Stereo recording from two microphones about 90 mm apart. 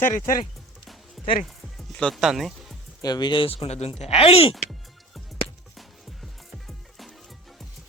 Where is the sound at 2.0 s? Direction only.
5° left (ahead or behind).